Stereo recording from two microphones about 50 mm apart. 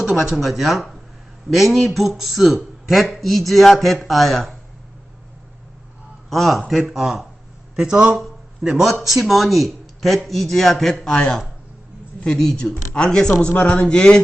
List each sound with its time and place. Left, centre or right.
0.2 s a man's voice: centre
6.3 s a man's voice: centre
7.8 s a man's voice: centre
9.0 s a man's voice: centre
13.5 s speech: left